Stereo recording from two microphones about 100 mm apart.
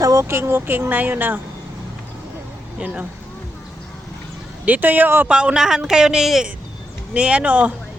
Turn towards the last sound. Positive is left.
turn(degrees=-15)  # may be behind; listen again after turning